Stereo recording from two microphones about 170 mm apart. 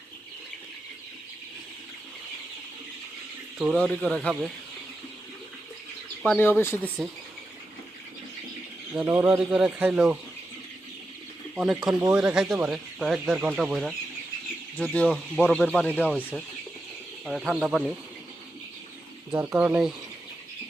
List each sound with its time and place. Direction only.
3.6 s speech: 10° right (ahead or behind)
3.8 s speech: 5° left (ahead or behind)
6.2 s speech: 10° left (ahead or behind)
9.0 s speech: 15° right (ahead or behind)
11.5 s speech: 10° right (ahead or behind)
14.9 s speech: centre (ahead or behind)
16.0 s speech: 5° right (ahead or behind)
19.3 s speech: 10° right (ahead or behind)